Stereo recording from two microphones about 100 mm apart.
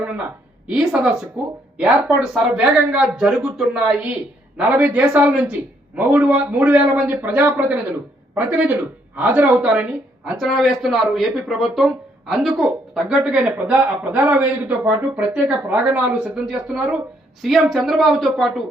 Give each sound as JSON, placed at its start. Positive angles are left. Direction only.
{"t": 1.4, "sound": "a man's voice", "side_deg": -10}
{"t": 12.6, "sound": "speech", "side_deg": -10}
{"t": 17.4, "sound": "speech", "side_deg": 0}